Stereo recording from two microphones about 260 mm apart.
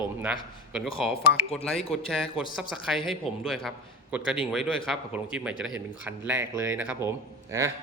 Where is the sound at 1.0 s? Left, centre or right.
Centre.